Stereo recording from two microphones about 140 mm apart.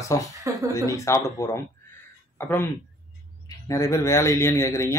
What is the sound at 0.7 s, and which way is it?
Speech, 20° left (ahead or behind).